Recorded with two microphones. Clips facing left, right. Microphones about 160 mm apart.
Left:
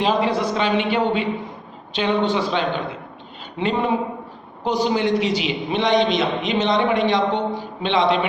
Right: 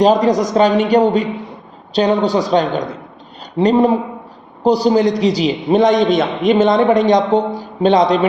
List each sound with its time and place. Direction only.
0.0 s a man's voice: 40° right (ahead or behind)